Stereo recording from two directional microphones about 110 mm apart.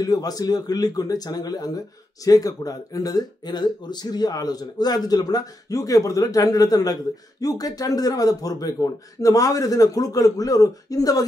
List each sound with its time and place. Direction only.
0.0 s speech: 35° left (ahead or behind)